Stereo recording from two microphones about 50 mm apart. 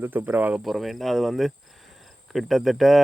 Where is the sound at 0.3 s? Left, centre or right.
Right.